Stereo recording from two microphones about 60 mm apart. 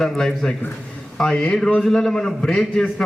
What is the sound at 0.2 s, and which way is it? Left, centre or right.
A man's voice, centre.